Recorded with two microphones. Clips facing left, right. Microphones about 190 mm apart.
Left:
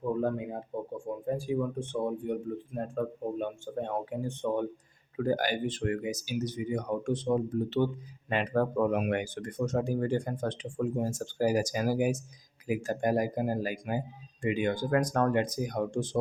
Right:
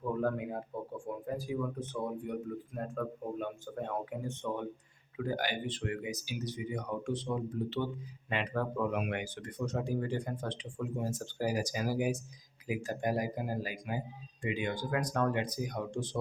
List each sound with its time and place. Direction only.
0.1 s speech: 20° left (ahead or behind)
5.1 s speech: 45° left (ahead or behind)